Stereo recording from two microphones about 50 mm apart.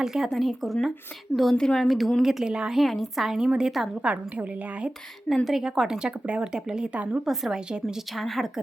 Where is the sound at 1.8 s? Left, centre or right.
Centre.